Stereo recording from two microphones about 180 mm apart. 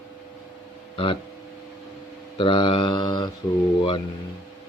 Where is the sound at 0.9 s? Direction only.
30° left (ahead or behind).